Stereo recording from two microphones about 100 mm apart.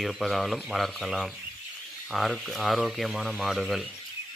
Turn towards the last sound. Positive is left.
turn(degrees=0)  # may be behind; listen again after turning